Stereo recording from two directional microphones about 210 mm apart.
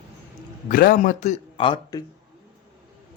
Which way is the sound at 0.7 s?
40° left (ahead or behind).